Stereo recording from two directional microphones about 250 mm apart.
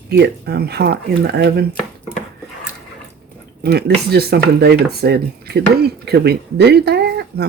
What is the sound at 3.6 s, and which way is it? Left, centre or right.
Speech, right.